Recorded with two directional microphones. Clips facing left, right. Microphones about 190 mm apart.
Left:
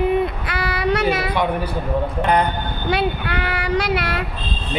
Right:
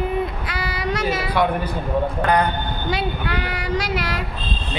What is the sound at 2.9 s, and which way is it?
Speech, 60° left (ahead or behind).